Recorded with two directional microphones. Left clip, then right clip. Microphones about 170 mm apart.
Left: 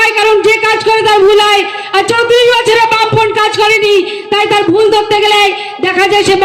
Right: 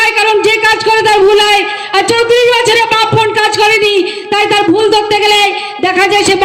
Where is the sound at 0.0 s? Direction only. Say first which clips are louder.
Left 1 dB; 40° right (ahead or behind).